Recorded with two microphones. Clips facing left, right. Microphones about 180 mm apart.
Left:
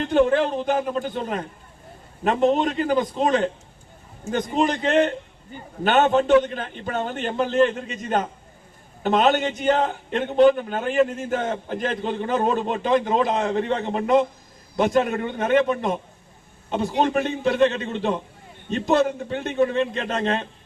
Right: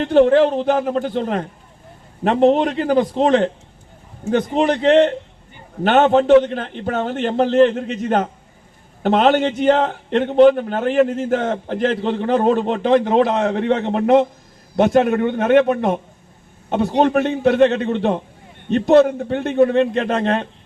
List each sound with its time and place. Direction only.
0.6 s a man's voice: 60° right (ahead or behind)
5.9 s a man's voice: 60° right (ahead or behind)